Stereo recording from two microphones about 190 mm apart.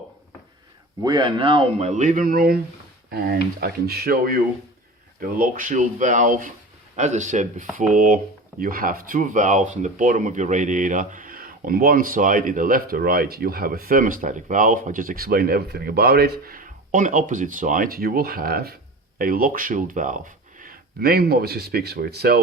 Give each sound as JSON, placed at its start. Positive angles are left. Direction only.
{"t": 1.0, "sound": "speech", "side_deg": -25}